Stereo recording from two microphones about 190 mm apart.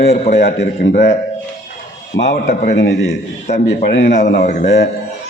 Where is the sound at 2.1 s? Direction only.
65° left (ahead or behind).